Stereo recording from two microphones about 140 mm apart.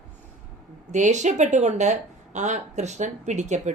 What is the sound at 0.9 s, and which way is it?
A woman's voice, 55° right (ahead or behind).